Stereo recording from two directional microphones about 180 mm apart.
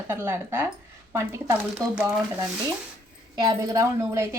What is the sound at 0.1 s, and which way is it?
A woman's voice, 10° right (ahead or behind).